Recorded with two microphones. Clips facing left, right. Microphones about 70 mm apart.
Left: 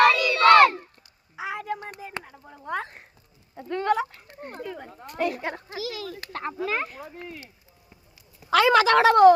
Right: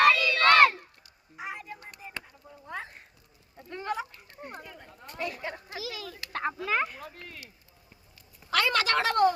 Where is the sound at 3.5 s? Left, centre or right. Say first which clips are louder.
Left 9 dB; left.